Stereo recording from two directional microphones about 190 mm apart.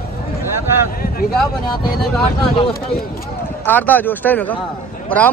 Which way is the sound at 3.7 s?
10° left (ahead or behind).